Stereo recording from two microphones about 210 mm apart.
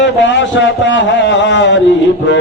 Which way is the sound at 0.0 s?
60° left (ahead or behind).